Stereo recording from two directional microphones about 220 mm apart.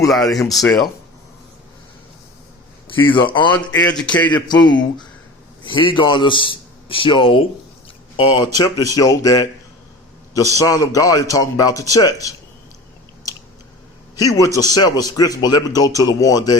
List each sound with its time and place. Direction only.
0.1 s speech: centre (ahead or behind)
2.8 s a man's voice: 20° left (ahead or behind)
3.8 s speech: 5° left (ahead or behind)
4.4 s a man's voice: 20° left (ahead or behind)
10.5 s a man's voice: 15° left (ahead or behind)
14.2 s a man's voice: 15° left (ahead or behind)